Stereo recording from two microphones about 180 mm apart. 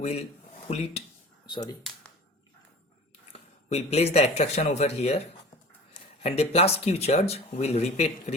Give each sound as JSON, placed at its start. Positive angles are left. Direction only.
{"t": 0.0, "sound": "speech", "side_deg": 40}
{"t": 1.5, "sound": "speech", "side_deg": 25}
{"t": 3.3, "sound": "speech", "side_deg": 35}